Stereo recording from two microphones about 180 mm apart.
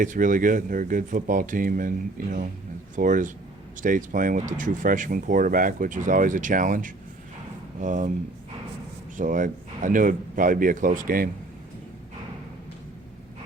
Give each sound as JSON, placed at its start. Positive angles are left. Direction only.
{"t": 0.0, "sound": "speech", "side_deg": -45}
{"t": 9.1, "sound": "speech", "side_deg": -45}